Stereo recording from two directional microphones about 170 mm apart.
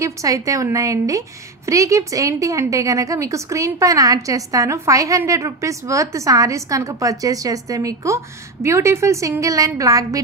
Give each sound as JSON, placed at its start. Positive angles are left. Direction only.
{"t": 0.0, "sound": "a woman's voice", "side_deg": -20}